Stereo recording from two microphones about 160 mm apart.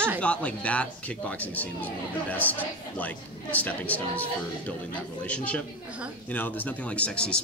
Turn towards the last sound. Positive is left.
turn(degrees=5)  # may be behind; listen again after turning